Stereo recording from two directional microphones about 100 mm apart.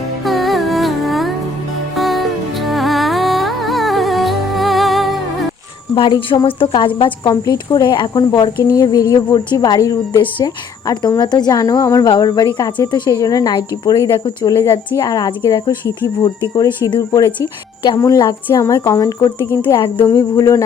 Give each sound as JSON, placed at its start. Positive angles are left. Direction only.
{"t": 0.3, "sound": "music", "side_deg": 0}
{"t": 5.9, "sound": "speech", "side_deg": 60}
{"t": 7.4, "sound": "speech", "side_deg": 40}
{"t": 8.6, "sound": "speech", "side_deg": 35}
{"t": 10.1, "sound": "speech", "side_deg": 55}
{"t": 10.4, "sound": "speech", "side_deg": 40}
{"t": 12.0, "sound": "speech", "side_deg": 50}
{"t": 14.5, "sound": "speech", "side_deg": 35}
{"t": 20.1, "sound": "speech", "side_deg": 35}